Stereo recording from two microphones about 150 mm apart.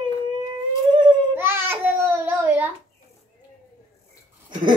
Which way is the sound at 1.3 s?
15° right (ahead or behind).